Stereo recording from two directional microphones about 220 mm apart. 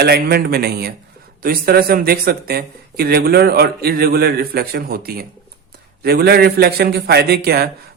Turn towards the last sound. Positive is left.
turn(degrees=-45)  # may be behind; listen again after turning